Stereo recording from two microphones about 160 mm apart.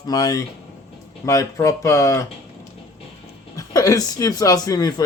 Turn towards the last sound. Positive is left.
turn(degrees=25)  # may be behind; listen again after turning